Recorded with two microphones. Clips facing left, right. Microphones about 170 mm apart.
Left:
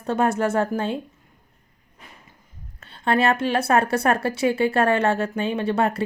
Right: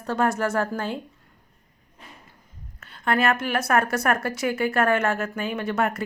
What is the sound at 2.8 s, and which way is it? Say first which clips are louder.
A woman's voice: left 2 dB; 30° left (ahead or behind).